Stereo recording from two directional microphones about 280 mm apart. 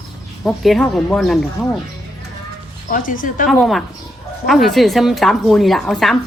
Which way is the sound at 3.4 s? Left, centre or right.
Centre.